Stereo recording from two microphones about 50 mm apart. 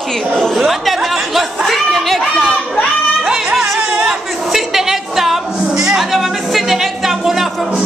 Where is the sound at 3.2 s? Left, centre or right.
Right.